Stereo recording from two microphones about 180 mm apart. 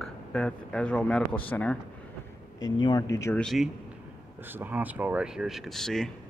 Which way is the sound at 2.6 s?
25° left (ahead or behind).